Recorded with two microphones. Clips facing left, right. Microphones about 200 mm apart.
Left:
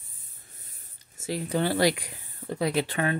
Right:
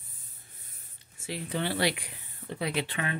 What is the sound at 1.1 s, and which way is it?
Speech, 40° left (ahead or behind).